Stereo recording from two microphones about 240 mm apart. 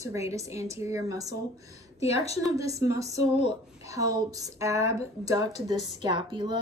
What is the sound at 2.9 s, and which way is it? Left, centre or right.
Speech, centre.